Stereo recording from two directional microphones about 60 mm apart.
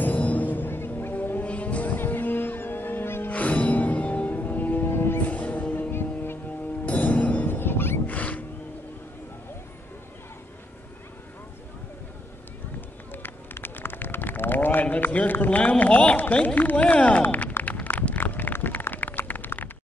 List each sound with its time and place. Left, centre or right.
0.0 s music: left
3.3 s music: left
5.3 s music: left
6.9 s music: left
8.1 s music: left
13.1 s run: left
15.8 s speech: left
17.2 s a sound: left
18.2 s a sound: left